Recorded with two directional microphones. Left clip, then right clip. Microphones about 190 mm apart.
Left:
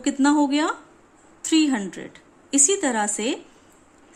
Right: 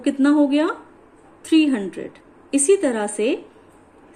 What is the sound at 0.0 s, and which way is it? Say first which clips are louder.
A woman's voice: right 2 dB; 50° left (ahead or behind).